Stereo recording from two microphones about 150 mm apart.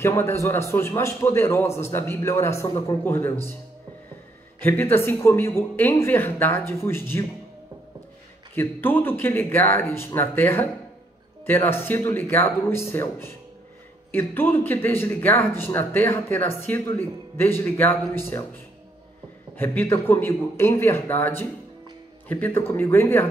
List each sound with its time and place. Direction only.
0.0 s speech: 15° left (ahead or behind)
4.9 s speech: 15° left (ahead or behind)
8.5 s speech: 15° left (ahead or behind)
19.5 s speech: 15° left (ahead or behind)